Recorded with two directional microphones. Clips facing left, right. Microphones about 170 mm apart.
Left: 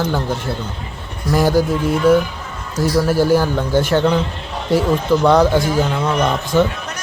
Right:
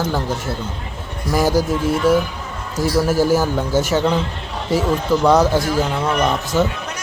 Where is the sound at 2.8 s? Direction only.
10° right (ahead or behind).